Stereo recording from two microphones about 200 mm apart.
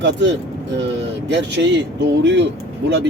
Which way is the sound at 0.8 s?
60° right (ahead or behind).